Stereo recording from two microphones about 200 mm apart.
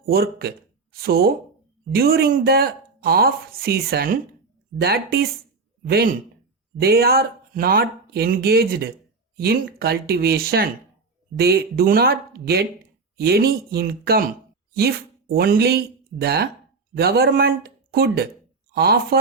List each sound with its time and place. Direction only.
0.0 s a woman's voice: 50° right (ahead or behind)